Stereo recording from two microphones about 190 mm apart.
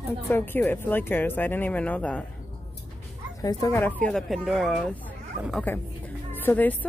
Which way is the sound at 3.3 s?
20° left (ahead or behind).